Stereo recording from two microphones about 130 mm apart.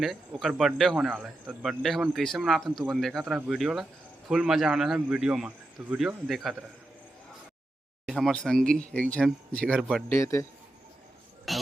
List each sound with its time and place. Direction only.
0.0 s speech: centre (ahead or behind)
6.2 s speech: centre (ahead or behind)
8.0 s speech: 5° left (ahead or behind)
10.1 s a man's voice: 25° left (ahead or behind)
11.5 s a sound: centre (ahead or behind)